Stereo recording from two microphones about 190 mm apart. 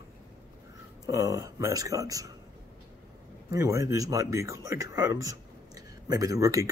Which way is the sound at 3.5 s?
15° right (ahead or behind).